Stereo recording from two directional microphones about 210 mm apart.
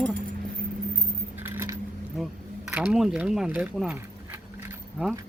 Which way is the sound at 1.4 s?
10° right (ahead or behind).